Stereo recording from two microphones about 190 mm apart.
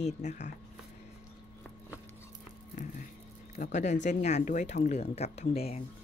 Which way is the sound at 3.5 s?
40° left (ahead or behind).